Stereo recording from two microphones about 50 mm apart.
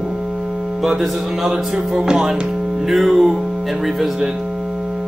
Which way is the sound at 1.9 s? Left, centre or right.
Centre.